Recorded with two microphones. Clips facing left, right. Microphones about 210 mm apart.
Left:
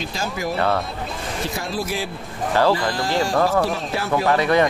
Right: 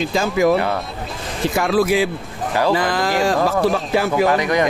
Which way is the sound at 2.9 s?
90° right.